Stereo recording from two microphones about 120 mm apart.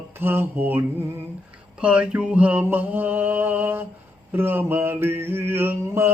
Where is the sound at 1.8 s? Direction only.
10° right (ahead or behind).